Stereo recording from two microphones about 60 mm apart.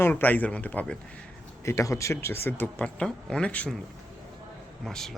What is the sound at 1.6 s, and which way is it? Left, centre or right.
Speech, left.